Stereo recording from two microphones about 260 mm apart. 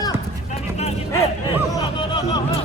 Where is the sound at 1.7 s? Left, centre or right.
Centre.